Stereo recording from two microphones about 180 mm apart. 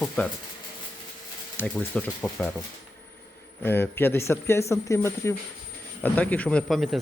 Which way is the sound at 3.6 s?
10° left (ahead or behind).